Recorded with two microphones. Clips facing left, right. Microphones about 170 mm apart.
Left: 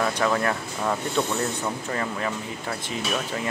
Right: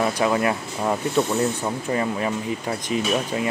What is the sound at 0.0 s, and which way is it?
Speech, 15° right (ahead or behind).